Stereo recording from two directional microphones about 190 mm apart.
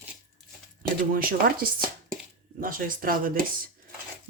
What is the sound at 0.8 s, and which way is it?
Speech, 50° right (ahead or behind).